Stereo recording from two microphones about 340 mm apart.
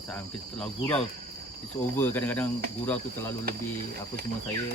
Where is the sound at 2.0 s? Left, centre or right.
Centre.